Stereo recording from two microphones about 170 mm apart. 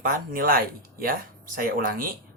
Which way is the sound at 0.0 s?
60° right (ahead or behind).